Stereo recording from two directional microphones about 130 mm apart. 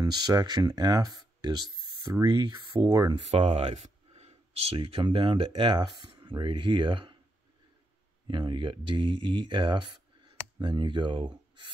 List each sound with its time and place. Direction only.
0.0 s speech: 30° right (ahead or behind)
3.3 s speech: 55° right (ahead or behind)
8.3 s speech: 35° right (ahead or behind)